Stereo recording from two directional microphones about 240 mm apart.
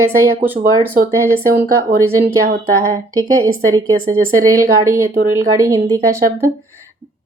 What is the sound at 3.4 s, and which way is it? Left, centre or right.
Speech, right.